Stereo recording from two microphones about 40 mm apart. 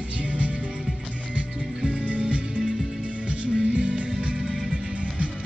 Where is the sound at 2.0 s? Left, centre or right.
Right.